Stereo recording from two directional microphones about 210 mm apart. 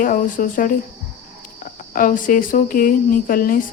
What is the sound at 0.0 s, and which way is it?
Speech, 40° left (ahead or behind).